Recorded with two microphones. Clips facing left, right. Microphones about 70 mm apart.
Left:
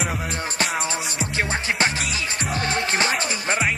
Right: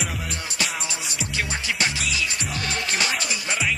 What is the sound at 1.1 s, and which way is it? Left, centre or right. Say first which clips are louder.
Music: left 4 dB; left.